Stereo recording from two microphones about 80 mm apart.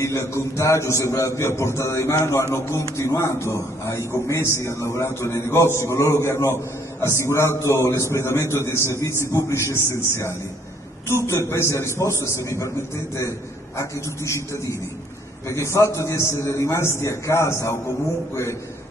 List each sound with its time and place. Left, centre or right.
0.0 s a man's voice: left